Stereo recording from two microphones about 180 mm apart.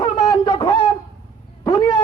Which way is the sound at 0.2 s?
20° left (ahead or behind).